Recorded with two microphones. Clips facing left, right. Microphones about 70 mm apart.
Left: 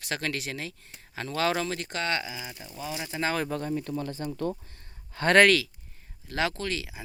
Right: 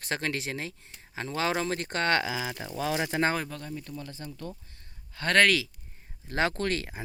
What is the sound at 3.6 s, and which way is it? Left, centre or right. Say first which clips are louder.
Speech: left 8 dB; left.